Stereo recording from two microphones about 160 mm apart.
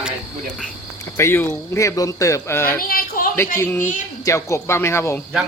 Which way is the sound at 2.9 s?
65° left (ahead or behind).